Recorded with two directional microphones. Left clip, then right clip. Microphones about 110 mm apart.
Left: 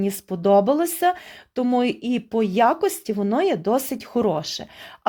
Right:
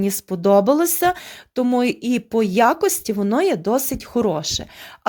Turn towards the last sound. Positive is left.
turn(degrees=-20)  # may be behind; listen again after turning